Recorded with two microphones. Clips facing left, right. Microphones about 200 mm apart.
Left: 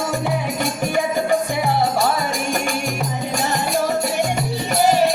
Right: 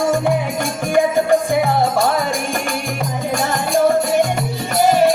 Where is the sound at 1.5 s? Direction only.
50° right (ahead or behind).